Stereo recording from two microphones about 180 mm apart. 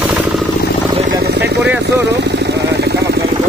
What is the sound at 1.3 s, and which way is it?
Vehicle, 70° right (ahead or behind).